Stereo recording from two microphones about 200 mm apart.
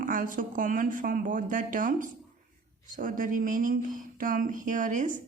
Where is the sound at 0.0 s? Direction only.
40° right (ahead or behind).